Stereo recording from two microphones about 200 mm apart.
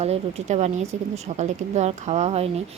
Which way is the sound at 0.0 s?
30° right (ahead or behind).